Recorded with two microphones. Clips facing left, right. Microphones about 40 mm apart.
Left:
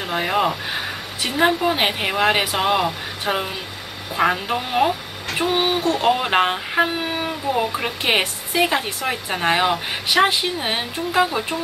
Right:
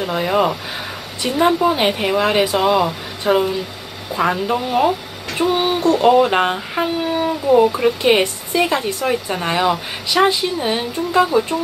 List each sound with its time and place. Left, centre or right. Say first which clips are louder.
0.3 s speech: right 3 dB; centre
1.2 s a woman's voice: right 3 dB; left
5.4 s a sound: right 3 dB; centre
5.9 s speech: right 6 dB; centre
11.1 s speech: right 4 dB; centre